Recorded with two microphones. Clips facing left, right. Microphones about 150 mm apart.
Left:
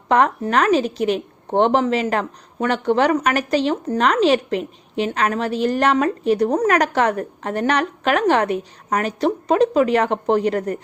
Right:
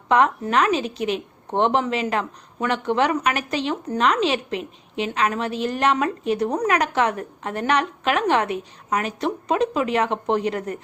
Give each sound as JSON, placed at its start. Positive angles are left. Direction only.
{"t": 0.1, "sound": "a woman's voice", "side_deg": 40}